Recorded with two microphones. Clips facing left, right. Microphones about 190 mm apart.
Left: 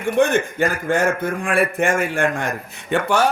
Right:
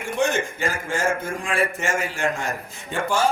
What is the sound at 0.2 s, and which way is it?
A man's voice, 55° left (ahead or behind).